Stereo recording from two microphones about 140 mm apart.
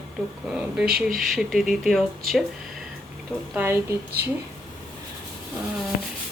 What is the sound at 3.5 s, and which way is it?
Speech, 15° right (ahead or behind).